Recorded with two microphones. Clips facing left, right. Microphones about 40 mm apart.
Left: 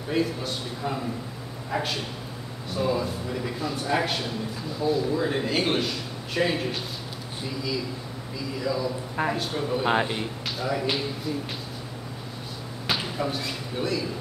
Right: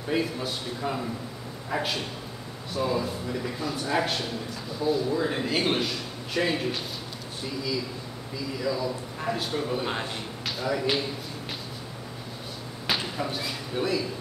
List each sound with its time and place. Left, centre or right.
0.1 s a man's voice: centre
8.5 s a man's voice: centre
9.8 s speech: left
10.6 s a man's voice: centre
12.8 s speech: centre